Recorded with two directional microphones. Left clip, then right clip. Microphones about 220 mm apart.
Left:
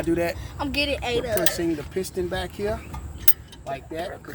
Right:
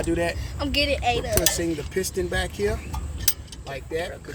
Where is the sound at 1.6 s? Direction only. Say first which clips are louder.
Even; 40° left (ahead or behind).